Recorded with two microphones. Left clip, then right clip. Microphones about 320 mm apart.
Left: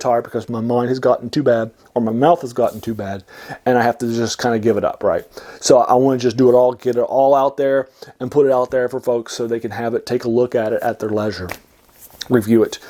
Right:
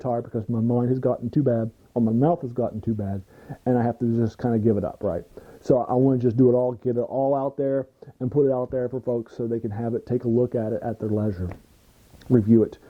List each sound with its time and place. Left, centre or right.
0.0 s speech: centre
1.9 s speech: centre
6.4 s speech: centre